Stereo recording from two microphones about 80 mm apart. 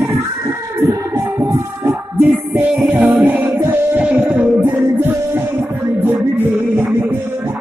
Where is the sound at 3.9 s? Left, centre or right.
Centre.